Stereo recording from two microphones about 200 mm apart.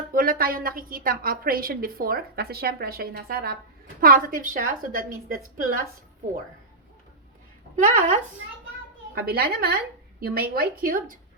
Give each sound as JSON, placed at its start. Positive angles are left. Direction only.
{"t": 0.1, "sound": "a woman's voice", "side_deg": -45}
{"t": 7.8, "sound": "speech", "side_deg": -40}
{"t": 9.1, "sound": "a woman's voice", "side_deg": -50}